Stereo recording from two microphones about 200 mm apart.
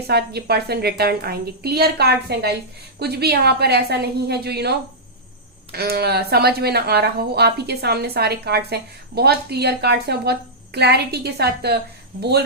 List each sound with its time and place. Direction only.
0.1 s speech: 55° right (ahead or behind)
5.7 s speech: 50° right (ahead or behind)